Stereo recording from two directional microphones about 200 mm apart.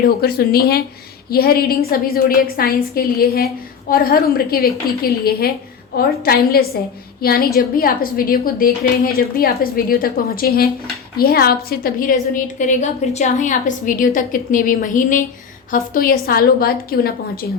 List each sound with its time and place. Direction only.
0.2 s a woman's voice: 50° left (ahead or behind)